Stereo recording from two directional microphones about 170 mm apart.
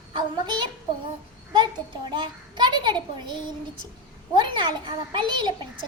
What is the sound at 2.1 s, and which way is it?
A child's voice, 25° right (ahead or behind).